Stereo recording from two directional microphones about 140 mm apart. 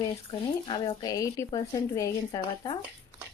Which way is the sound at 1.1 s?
25° left (ahead or behind).